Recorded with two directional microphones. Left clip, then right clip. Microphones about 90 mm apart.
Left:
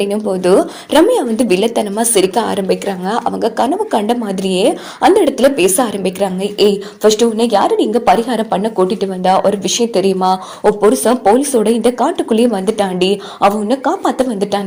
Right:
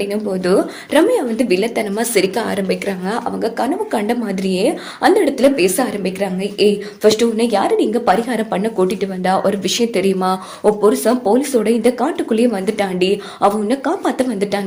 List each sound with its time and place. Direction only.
0.1 s a woman's voice: 60° left (ahead or behind); by 1.7 s 90° left
1.7 s speech: 40° left (ahead or behind)
3.2 s a woman's voice: 65° left (ahead or behind); by 9.4 s 35° left (ahead or behind)
9.4 s speech: 20° left (ahead or behind)
10.9 s speech: 50° left (ahead or behind); by 14.6 s 20° left (ahead or behind)